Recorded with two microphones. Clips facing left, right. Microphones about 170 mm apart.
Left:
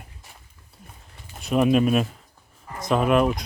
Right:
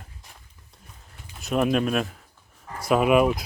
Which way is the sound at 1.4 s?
Centre (ahead or behind).